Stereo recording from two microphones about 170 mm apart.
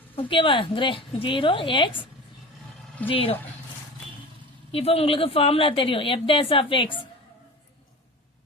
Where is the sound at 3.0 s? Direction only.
35° left (ahead or behind).